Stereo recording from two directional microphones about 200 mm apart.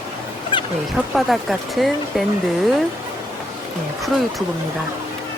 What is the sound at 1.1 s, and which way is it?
Speech, centre (ahead or behind).